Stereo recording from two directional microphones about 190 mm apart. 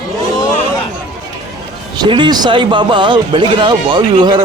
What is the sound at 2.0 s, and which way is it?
Speech, 25° right (ahead or behind).